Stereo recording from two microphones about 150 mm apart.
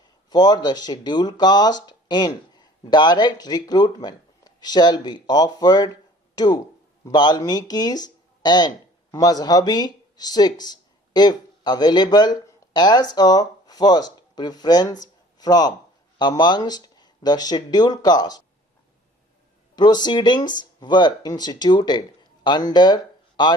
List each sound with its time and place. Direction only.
0.0 s speech: 25° left (ahead or behind)
19.7 s speech: 30° left (ahead or behind)